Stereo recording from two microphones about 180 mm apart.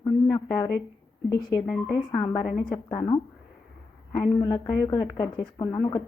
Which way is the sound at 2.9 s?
25° left (ahead or behind).